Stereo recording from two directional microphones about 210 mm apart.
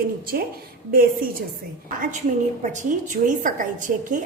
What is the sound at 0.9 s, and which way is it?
Speech, 45° right (ahead or behind).